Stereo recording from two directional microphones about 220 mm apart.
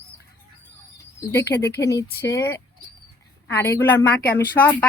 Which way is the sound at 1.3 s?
10° left (ahead or behind).